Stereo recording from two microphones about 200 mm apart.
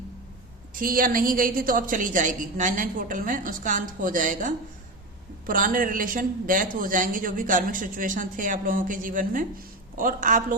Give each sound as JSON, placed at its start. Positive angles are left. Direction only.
{"t": 0.7, "sound": "a man's voice", "side_deg": -45}